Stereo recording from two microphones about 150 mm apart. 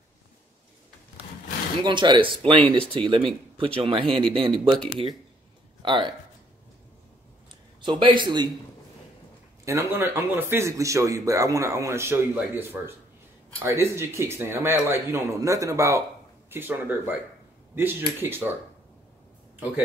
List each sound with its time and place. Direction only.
1.8 s speech: 30° right (ahead or behind)
5.8 s speech: 30° right (ahead or behind)
7.8 s a man's voice: 30° right (ahead or behind)
9.7 s speech: 15° right (ahead or behind)